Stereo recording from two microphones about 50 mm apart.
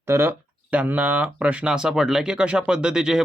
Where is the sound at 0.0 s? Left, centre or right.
Right.